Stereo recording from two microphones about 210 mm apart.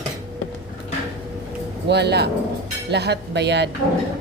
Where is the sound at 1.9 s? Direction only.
55° right (ahead or behind).